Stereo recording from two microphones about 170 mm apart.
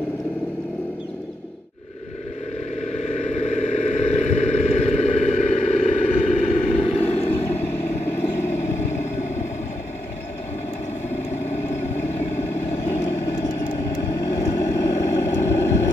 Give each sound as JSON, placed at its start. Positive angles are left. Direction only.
{"t": 2.9, "sound": "vehicle", "side_deg": 40}
{"t": 7.3, "sound": "vehicle", "side_deg": 10}
{"t": 11.5, "sound": "vehicle", "side_deg": 15}